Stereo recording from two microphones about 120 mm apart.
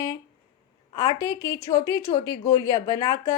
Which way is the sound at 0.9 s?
40° left (ahead or behind).